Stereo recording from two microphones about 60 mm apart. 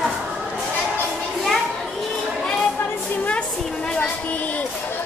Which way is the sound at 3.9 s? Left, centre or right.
Left.